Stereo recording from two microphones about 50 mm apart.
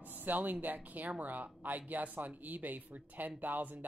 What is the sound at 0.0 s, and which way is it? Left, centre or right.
Speech, right.